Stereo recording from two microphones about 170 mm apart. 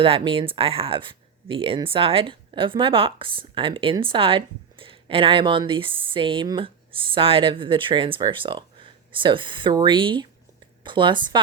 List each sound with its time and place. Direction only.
0.0 s speech: 35° right (ahead or behind)